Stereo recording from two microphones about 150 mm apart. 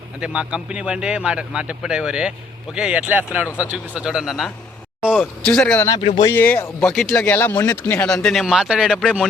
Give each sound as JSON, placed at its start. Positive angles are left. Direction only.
{"t": 0.2, "sound": "speech", "side_deg": -5}
{"t": 6.0, "sound": "speech", "side_deg": 40}
{"t": 6.3, "sound": "speech", "side_deg": 10}
{"t": 8.0, "sound": "speech", "side_deg": 5}